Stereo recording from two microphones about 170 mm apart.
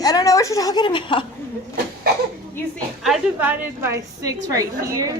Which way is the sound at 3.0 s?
5° right (ahead or behind).